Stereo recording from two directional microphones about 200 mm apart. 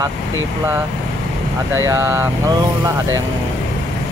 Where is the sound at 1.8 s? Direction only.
15° right (ahead or behind).